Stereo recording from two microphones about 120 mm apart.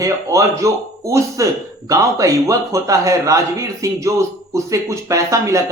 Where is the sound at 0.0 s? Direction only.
25° right (ahead or behind).